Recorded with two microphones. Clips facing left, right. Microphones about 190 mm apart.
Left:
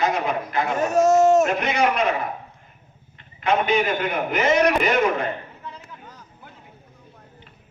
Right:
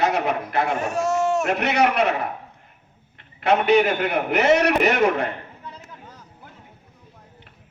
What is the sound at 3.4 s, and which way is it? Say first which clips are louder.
A man's voice: right 3 dB; 70° right (ahead or behind).